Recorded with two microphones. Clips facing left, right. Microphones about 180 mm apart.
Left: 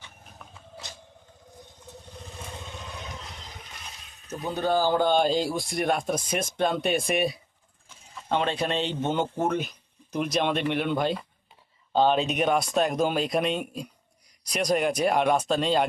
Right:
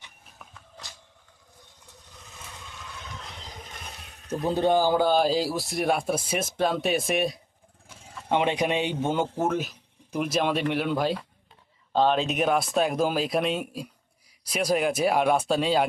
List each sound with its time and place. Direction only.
0.8 s a sound: 20° left (ahead or behind)
2.1 s vehicle: 30° left (ahead or behind)
3.8 s water: 60° right (ahead or behind)
4.4 s speech: 25° right (ahead or behind)
4.8 s speech: 10° right (ahead or behind)
8.3 s a man's voice: 15° right (ahead or behind)